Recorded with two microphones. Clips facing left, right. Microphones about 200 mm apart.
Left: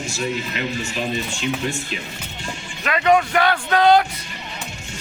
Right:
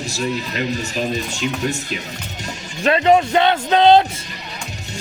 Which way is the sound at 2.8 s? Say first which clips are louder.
Right 3 dB; 30° right (ahead or behind).